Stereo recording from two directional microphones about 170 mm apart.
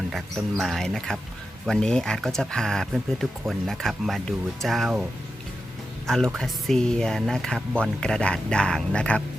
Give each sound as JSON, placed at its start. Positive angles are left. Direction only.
{"t": 0.1, "sound": "speech", "side_deg": 0}
{"t": 6.1, "sound": "speech", "side_deg": 0}